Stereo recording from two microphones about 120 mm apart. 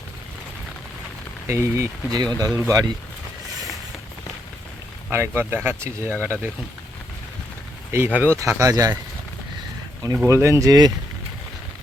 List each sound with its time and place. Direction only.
1.5 s speech: 25° right (ahead or behind)
2.0 s speech: 35° right (ahead or behind)
5.1 s speech: 20° right (ahead or behind)
7.9 s speech: 15° right (ahead or behind)
10.2 s speech: 25° right (ahead or behind)